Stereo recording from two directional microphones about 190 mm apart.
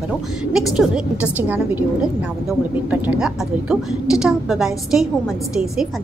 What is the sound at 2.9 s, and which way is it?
A woman's voice, 5° right (ahead or behind).